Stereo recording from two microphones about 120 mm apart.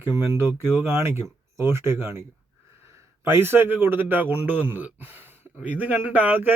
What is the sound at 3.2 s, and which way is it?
Speech, 20° right (ahead or behind).